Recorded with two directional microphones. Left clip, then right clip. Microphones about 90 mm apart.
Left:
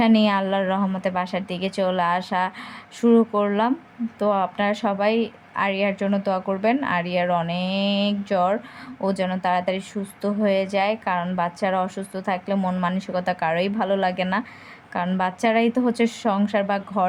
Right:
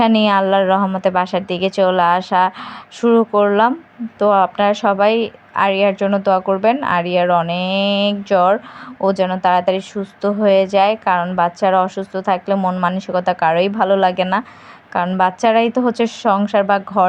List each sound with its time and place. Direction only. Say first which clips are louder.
0.0 s speech: right 6 dB; 25° right (ahead or behind)
12.5 s a woman's voice: right 7 dB; 10° right (ahead or behind)